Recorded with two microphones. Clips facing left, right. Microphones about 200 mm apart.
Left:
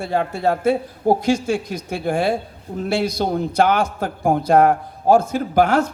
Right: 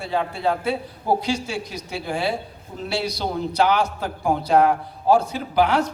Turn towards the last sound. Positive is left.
turn(degrees=45)  # may be behind; listen again after turning